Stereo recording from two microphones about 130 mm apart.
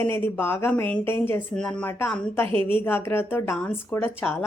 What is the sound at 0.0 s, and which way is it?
A woman's voice, 15° left (ahead or behind).